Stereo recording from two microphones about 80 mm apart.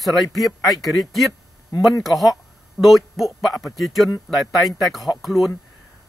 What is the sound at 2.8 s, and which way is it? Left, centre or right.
Speech, centre.